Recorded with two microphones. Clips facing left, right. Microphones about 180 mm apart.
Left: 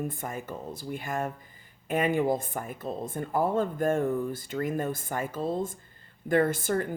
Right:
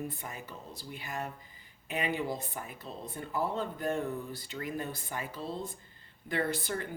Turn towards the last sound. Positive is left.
turn(degrees=50)  # may be behind; listen again after turning